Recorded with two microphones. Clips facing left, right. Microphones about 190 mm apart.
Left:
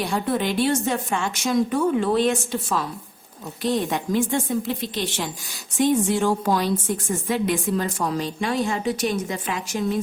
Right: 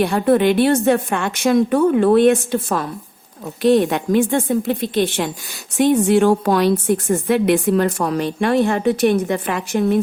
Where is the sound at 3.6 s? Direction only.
65° right (ahead or behind).